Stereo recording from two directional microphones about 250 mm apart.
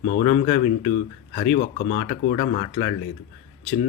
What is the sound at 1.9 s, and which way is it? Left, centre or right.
Speech, left.